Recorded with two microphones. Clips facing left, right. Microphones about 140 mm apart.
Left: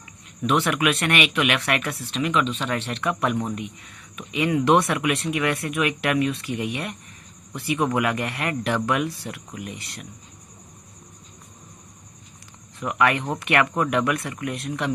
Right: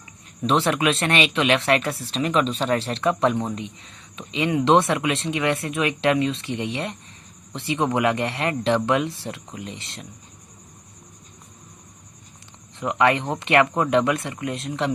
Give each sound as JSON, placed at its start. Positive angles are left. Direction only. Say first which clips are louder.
{"t": 0.4, "sound": "speech", "louder": "right 1 dB", "side_deg": -30}
{"t": 12.8, "sound": "speech", "louder": "right 2 dB", "side_deg": -25}